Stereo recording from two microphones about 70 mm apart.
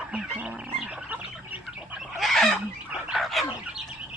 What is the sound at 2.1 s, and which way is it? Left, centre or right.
Fowl, centre.